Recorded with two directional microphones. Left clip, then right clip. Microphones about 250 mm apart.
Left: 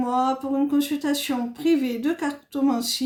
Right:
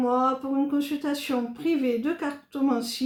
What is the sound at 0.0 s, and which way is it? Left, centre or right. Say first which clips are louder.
Speech: left 1 dB; left.